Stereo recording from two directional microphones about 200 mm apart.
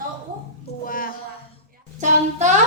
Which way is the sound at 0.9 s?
45° left (ahead or behind).